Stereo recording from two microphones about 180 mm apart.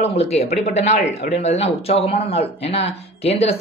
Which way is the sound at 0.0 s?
35° left (ahead or behind).